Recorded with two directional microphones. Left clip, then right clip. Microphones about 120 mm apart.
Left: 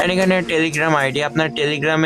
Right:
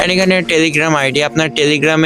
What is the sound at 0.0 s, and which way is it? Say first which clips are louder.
A man's voice: right 4 dB; 35° right (ahead or behind).